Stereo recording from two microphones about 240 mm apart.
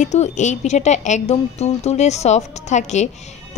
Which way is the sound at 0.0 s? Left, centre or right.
Left.